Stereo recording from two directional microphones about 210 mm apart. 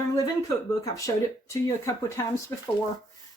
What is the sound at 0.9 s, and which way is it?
Speech, 15° left (ahead or behind).